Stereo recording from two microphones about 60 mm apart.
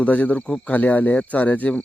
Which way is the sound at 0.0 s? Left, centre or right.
Left.